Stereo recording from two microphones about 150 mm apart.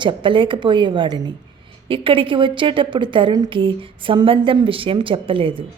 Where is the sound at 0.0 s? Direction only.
35° right (ahead or behind).